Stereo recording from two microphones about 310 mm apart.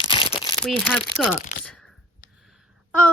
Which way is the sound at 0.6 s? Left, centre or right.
Centre.